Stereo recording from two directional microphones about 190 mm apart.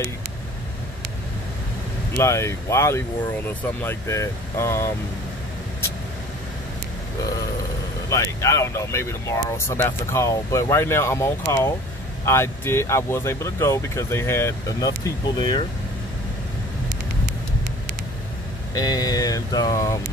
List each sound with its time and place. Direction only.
2.1 s speech: 15° left (ahead or behind)
8.1 s speech: 15° left (ahead or behind)
18.8 s speech: 20° left (ahead or behind)